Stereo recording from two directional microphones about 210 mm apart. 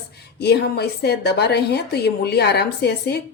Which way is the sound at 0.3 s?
50° left (ahead or behind).